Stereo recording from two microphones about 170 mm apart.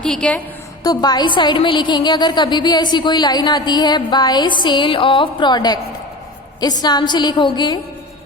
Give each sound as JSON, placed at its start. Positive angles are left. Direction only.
{"t": 0.0, "sound": "a woman's voice", "side_deg": 5}
{"t": 0.9, "sound": "a woman's voice", "side_deg": 25}